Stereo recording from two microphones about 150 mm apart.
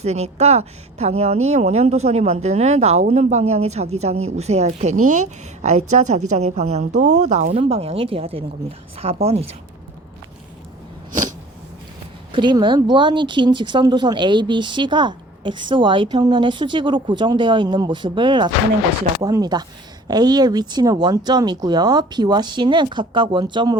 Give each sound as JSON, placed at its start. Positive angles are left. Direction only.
{"t": 0.0, "sound": "speech", "side_deg": -45}
{"t": 7.5, "sound": "speech", "side_deg": -40}
{"t": 12.3, "sound": "speech", "side_deg": -30}